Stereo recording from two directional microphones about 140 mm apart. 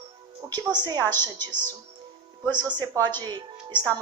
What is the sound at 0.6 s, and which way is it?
Speech, 30° right (ahead or behind).